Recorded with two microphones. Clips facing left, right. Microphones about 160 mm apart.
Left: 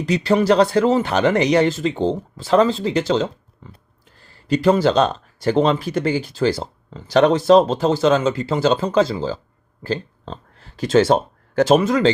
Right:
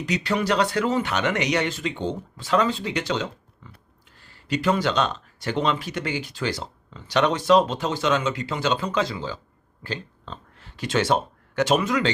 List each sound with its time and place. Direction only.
0.0 s speech: 35° left (ahead or behind)